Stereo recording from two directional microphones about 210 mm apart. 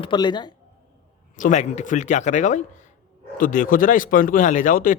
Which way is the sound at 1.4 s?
35° left (ahead or behind).